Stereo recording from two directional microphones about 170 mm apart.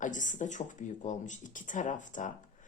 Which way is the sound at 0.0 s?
50° left (ahead or behind).